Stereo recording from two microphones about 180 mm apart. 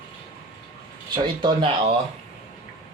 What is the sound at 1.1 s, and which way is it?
Speech, 25° right (ahead or behind).